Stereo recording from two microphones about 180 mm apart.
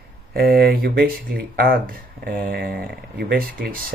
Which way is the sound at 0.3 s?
55° right (ahead or behind).